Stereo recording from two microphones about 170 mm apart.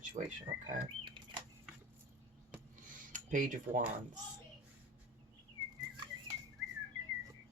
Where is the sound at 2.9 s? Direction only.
50° right (ahead or behind).